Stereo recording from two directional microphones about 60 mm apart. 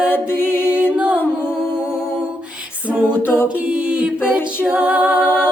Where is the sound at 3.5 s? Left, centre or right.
Right.